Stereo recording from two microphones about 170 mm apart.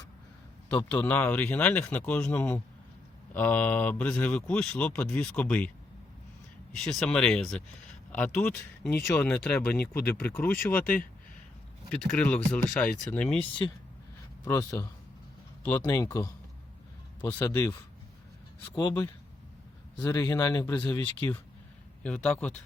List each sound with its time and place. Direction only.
0.7 s speech: 10° left (ahead or behind)
6.7 s speech: 5° left (ahead or behind)
13.4 s speech: 25° left (ahead or behind)
17.3 s speech: 20° left (ahead or behind)
22.0 s speech: 5° left (ahead or behind)